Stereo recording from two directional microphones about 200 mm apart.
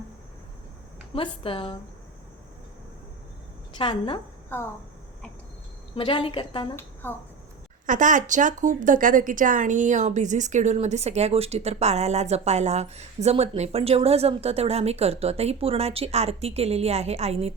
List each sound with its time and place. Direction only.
1.1 s a woman's voice: 25° left (ahead or behind)
3.8 s a woman's voice: 25° left (ahead or behind)
4.4 s speech: 10° left (ahead or behind)
6.0 s a woman's voice: 25° left (ahead or behind)
7.0 s a child's voice: 10° left (ahead or behind)
7.9 s speech: 40° right (ahead or behind)